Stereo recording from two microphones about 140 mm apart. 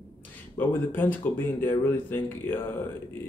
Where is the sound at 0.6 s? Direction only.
15° left (ahead or behind).